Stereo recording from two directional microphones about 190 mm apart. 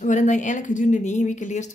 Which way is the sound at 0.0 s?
40° left (ahead or behind).